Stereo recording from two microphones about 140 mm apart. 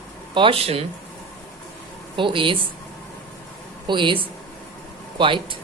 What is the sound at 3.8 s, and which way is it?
Speech, 35° right (ahead or behind).